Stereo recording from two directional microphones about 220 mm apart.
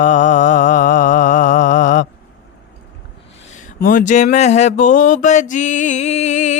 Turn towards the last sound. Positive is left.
turn(degrees=35)  # may be behind; listen again after turning